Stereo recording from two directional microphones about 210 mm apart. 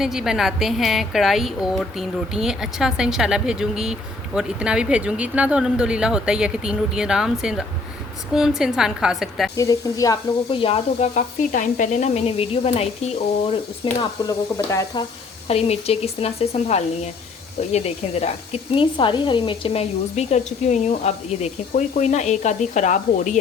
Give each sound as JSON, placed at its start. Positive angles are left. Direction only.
{"t": 0.0, "sound": "a woman's voice", "side_deg": 0}
{"t": 9.6, "sound": "speech", "side_deg": 15}
{"t": 15.4, "sound": "speech", "side_deg": 30}